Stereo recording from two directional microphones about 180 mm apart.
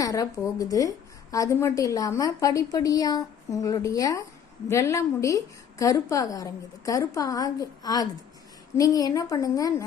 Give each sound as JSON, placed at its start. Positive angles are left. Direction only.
{"t": 0.0, "sound": "a woman's voice", "side_deg": 20}